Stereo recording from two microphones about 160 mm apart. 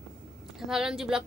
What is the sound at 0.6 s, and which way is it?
Speech, centre (ahead or behind).